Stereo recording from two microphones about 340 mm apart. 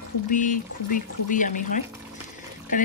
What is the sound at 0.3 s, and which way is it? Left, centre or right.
Speech, left.